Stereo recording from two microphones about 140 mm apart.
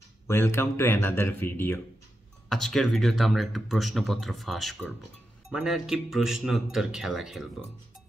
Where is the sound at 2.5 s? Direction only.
5° left (ahead or behind).